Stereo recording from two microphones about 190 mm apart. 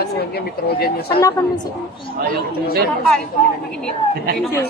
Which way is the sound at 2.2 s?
50° right (ahead or behind).